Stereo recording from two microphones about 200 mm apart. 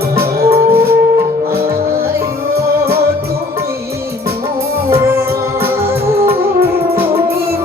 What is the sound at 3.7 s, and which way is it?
Music, 15° right (ahead or behind).